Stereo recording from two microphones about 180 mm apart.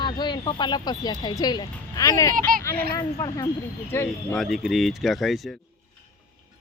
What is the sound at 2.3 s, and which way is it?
Speech, 50° right (ahead or behind).